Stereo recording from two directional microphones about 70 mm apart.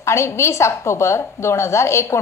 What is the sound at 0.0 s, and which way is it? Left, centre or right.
A woman's voice, left.